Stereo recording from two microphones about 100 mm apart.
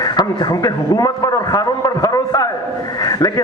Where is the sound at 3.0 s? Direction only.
40° left (ahead or behind).